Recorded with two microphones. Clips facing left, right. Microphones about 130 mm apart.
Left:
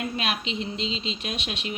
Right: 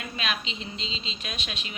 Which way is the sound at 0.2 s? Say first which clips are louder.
Left 4 dB; 60° left (ahead or behind).